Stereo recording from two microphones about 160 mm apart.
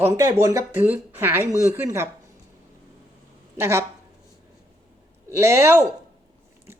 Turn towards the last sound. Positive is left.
turn(degrees=-15)  # may be behind; listen again after turning